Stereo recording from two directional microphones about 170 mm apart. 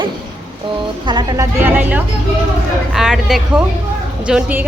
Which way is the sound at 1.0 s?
25° right (ahead or behind).